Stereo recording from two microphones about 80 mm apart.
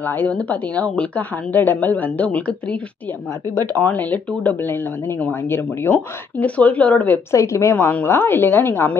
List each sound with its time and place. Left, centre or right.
0.0 s a woman's voice: left
6.4 s speech: centre
7.2 s a woman's voice: left
7.7 s a woman's voice: left